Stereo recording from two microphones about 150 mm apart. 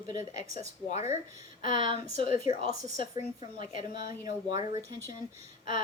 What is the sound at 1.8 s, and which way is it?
Speech, 35° right (ahead or behind).